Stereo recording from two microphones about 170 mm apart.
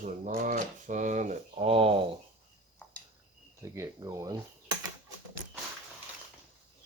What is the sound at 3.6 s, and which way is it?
Speech, 15° right (ahead or behind).